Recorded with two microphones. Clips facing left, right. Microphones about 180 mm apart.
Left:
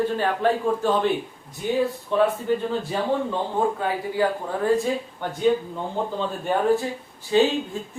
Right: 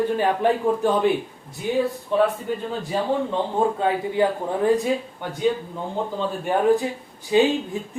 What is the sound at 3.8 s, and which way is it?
A woman's voice, 20° right (ahead or behind).